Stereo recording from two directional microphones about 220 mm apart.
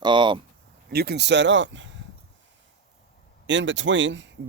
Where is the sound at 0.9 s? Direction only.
45° right (ahead or behind).